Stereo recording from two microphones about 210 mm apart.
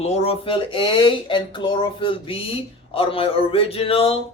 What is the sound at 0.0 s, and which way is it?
A man's voice, 30° left (ahead or behind).